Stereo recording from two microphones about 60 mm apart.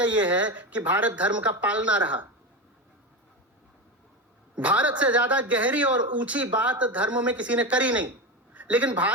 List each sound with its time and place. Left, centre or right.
0.0 s speech: right
4.5 s a woman's voice: right